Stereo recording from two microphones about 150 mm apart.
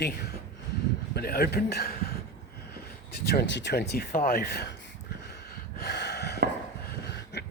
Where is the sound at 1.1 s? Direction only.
90° left.